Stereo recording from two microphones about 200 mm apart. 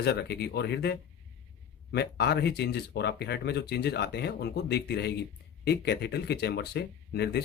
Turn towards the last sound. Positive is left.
turn(degrees=55)  # may be behind; listen again after turning